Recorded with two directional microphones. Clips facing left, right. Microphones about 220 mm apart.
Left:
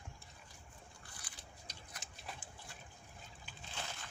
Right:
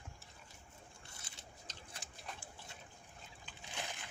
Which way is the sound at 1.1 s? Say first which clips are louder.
Even; 25° right (ahead or behind).